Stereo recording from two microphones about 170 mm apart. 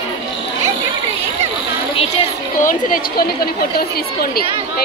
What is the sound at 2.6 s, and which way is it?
A woman's voice, 60° left (ahead or behind).